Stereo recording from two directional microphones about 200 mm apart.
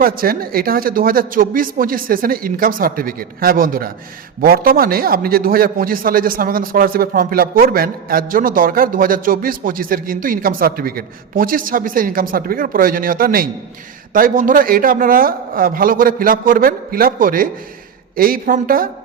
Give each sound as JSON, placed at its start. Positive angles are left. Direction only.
{"t": 0.0, "sound": "a man's voice", "side_deg": -45}